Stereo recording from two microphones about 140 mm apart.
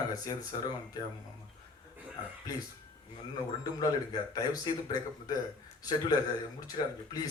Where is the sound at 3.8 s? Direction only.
25° left (ahead or behind).